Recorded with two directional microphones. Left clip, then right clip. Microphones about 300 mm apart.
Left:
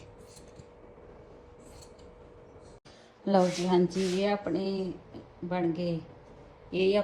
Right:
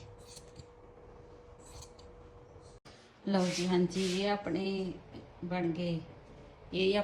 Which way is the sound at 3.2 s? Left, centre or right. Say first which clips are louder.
Left 7 dB; centre.